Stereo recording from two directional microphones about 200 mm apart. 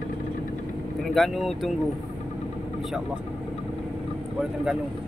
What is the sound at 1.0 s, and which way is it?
Speech, centre (ahead or behind).